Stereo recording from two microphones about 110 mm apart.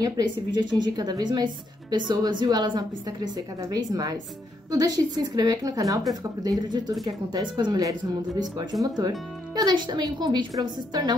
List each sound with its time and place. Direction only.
0.0 s a woman's voice: 45° right (ahead or behind)